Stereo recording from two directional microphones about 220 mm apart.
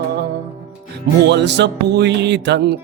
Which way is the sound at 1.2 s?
50° right (ahead or behind).